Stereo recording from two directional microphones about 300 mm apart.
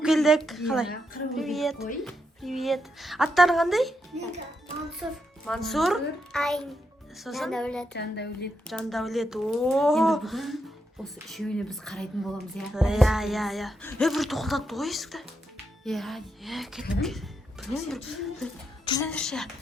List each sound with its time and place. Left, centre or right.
0.0 s a woman's voice: centre
7.9 s speech: left
8.6 s speech: centre